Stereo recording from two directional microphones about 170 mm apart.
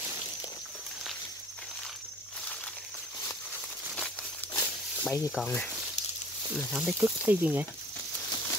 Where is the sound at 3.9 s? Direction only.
5° left (ahead or behind).